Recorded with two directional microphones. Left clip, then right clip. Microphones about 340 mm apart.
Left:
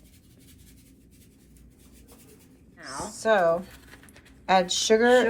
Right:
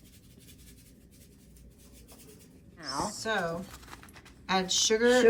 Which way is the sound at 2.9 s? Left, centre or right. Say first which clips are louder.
Left 8 dB; centre.